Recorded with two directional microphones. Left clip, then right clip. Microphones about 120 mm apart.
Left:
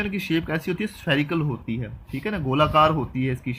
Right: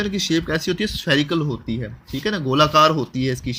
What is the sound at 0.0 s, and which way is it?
Speech, 30° right (ahead or behind).